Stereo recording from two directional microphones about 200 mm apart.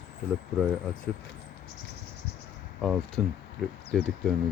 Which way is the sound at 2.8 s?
Centre (ahead or behind).